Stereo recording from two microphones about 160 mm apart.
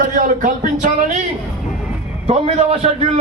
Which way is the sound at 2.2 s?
40° right (ahead or behind).